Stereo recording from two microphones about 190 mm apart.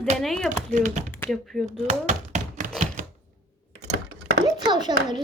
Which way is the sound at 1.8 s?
40° right (ahead or behind).